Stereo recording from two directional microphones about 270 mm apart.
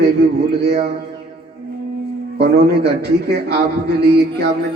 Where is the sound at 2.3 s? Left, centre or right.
Right.